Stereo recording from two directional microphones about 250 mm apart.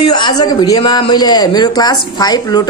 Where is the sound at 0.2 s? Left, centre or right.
Centre.